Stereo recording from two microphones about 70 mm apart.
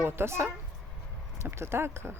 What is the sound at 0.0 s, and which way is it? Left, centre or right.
Speech, right.